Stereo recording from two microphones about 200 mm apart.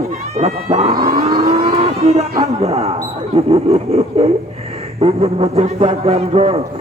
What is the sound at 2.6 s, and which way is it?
Speech, 30° right (ahead or behind).